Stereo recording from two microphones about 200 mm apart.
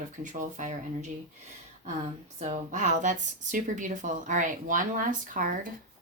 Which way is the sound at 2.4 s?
35° right (ahead or behind).